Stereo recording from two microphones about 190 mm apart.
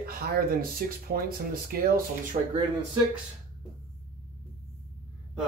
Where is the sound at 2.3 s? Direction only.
40° right (ahead or behind).